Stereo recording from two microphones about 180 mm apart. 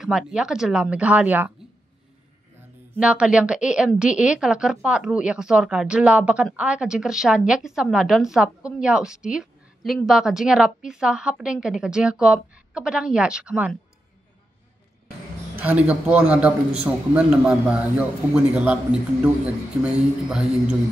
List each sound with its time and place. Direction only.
0.0 s a woman's voice: 5° right (ahead or behind)
2.9 s a woman's voice: 5° right (ahead or behind)
15.6 s a man's voice: 5° right (ahead or behind)